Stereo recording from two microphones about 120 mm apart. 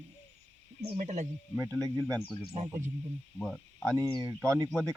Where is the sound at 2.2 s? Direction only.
50° left (ahead or behind).